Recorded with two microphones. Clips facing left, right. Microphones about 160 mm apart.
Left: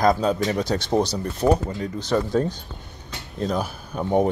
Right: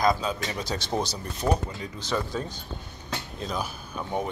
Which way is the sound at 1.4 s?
45° left (ahead or behind).